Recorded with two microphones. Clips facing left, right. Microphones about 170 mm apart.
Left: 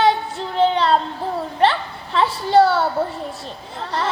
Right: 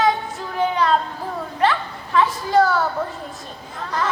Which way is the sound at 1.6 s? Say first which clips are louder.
Left 2 dB; 30° left (ahead or behind).